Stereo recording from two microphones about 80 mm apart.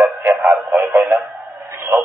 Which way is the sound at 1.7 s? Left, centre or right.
Right.